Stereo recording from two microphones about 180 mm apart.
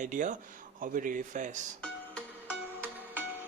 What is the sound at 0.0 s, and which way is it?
Speech, 45° right (ahead or behind).